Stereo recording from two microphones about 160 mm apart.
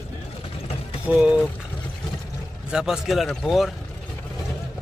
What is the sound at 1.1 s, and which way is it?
Speech, 5° right (ahead or behind).